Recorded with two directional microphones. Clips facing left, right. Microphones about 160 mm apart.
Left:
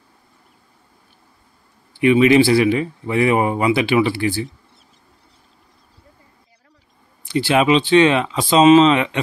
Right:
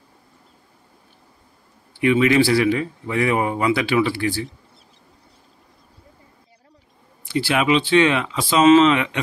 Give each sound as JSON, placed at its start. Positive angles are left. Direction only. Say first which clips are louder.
{"t": 2.0, "sound": "speech", "louder": "left 4 dB", "side_deg": 20}
{"t": 7.3, "sound": "speech", "louder": "left 3 dB", "side_deg": 25}